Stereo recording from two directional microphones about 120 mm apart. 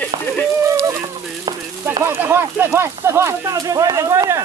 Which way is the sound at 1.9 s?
20° right (ahead or behind).